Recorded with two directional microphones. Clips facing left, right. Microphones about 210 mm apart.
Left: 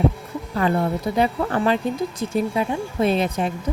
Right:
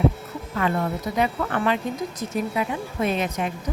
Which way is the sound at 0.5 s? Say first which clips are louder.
Left 3 dB; 35° left (ahead or behind).